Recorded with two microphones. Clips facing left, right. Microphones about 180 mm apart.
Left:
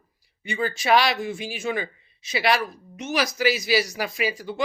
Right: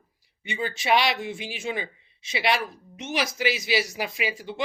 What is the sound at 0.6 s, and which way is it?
Speech, 45° left (ahead or behind).